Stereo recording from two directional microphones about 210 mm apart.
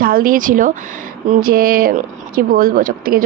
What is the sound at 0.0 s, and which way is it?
Speech, 45° right (ahead or behind).